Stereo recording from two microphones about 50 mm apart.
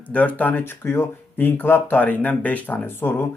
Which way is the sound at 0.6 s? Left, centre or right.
Left.